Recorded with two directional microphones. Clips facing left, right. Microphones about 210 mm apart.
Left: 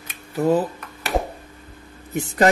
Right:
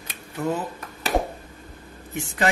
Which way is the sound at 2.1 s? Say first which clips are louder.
Left 7 dB; 40° left (ahead or behind).